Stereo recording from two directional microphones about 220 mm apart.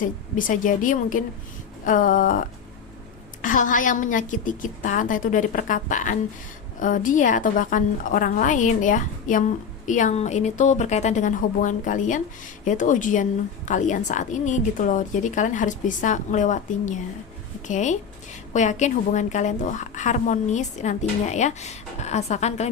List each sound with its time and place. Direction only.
0.0 s a woman's voice: 35° left (ahead or behind)